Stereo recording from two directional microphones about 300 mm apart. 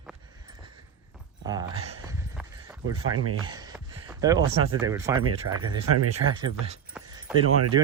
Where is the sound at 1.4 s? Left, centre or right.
Centre.